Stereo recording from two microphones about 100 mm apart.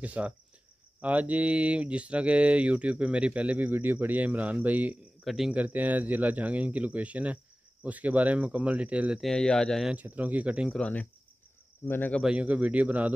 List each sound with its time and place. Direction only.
0.0 s speech: 15° right (ahead or behind)
5.2 s speech: centre (ahead or behind)
5.5 s speech: 15° right (ahead or behind)
9.2 s speech: 5° left (ahead or behind)
9.8 s speech: 15° right (ahead or behind)
10.7 s speech: 10° left (ahead or behind)
12.2 s speech: 10° right (ahead or behind)